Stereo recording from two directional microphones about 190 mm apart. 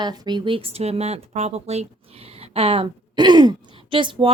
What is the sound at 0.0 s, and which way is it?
A woman's voice, 20° right (ahead or behind).